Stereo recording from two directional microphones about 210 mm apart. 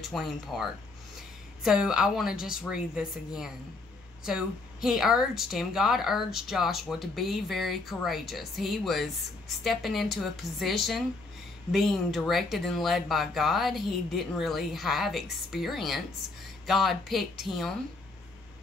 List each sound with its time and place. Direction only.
0.1 s a woman's voice: centre (ahead or behind)